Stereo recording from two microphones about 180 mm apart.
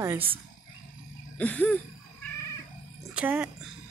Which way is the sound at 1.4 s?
10° left (ahead or behind).